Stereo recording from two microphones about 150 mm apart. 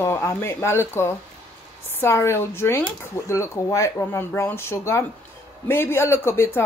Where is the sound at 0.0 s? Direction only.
15° left (ahead or behind).